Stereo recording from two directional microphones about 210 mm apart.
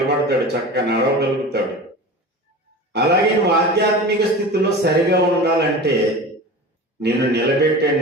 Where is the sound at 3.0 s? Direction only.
50° right (ahead or behind).